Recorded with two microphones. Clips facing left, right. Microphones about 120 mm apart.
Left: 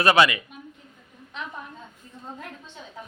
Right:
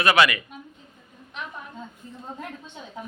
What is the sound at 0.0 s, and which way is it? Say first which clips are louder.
Speech: left 1 dB; 25° left (ahead or behind).